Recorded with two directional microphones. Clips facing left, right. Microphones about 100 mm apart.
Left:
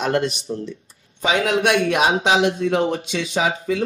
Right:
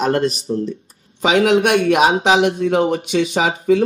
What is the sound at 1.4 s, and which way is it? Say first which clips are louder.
Speech: right 5 dB; 50° right (ahead or behind).